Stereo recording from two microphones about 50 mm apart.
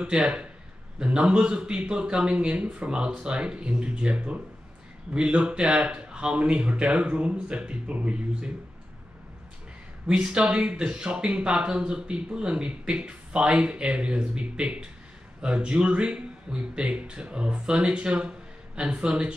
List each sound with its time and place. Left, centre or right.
0.0 s speech: right
10.0 s speech: centre